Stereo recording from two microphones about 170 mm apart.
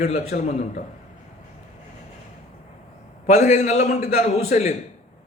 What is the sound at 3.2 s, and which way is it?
A man's voice, 40° left (ahead or behind).